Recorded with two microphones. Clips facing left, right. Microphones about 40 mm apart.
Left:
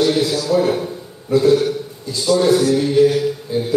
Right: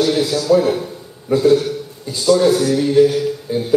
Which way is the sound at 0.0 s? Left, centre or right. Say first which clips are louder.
Even; centre.